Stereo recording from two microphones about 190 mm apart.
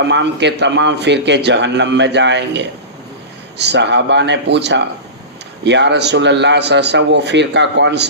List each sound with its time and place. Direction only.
0.0 s a man's voice: 65° right (ahead or behind)